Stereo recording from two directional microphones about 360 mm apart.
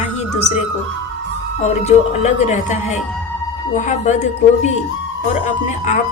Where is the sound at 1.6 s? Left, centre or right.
Centre.